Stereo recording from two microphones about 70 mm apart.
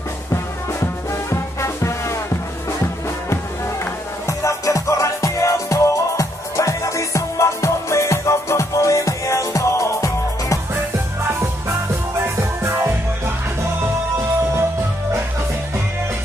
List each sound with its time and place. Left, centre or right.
1.3 s music: left
4.3 s music: left
12.2 s music: right